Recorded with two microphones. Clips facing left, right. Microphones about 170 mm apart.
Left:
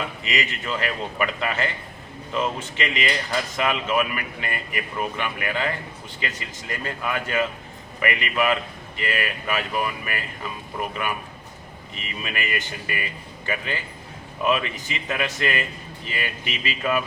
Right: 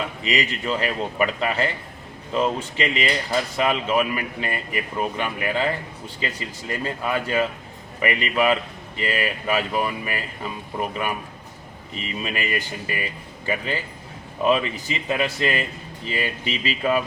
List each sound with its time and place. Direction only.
0.3 s speech: 35° right (ahead or behind)
2.7 s speech: 30° right (ahead or behind)